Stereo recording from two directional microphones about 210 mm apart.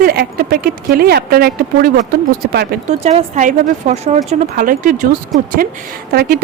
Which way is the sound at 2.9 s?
30° right (ahead or behind).